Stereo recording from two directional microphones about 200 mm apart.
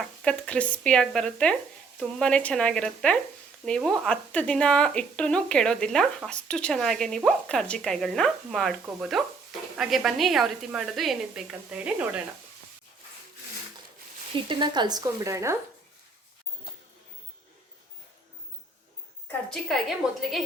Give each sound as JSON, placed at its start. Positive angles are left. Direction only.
{"t": 0.0, "sound": "speech", "side_deg": 5}
{"t": 14.3, "sound": "speech", "side_deg": -25}
{"t": 19.5, "sound": "speech", "side_deg": 0}